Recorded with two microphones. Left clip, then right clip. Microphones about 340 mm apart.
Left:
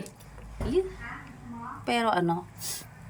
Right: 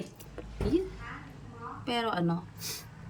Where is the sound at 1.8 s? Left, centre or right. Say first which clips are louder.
Left 5 dB; centre.